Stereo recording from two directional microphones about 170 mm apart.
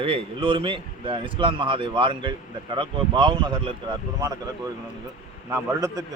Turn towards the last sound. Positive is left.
turn(degrees=-15)  # may be behind; listen again after turning